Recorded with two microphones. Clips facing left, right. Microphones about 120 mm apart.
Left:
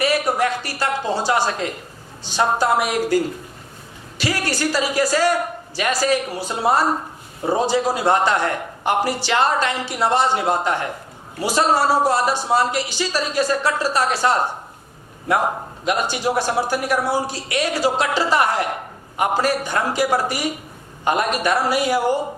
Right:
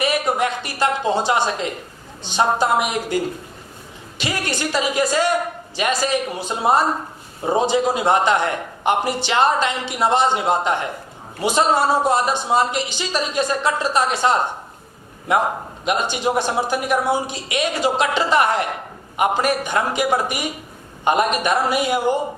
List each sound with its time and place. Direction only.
0.0 s a woman's voice: 20° right (ahead or behind)
4.2 s a man's voice: 20° right (ahead or behind)